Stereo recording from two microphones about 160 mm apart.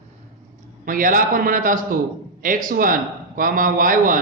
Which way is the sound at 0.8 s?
60° right (ahead or behind).